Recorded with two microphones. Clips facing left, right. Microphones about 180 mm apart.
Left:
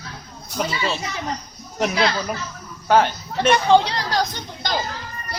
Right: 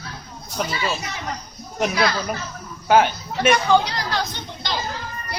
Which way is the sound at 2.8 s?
5° right (ahead or behind).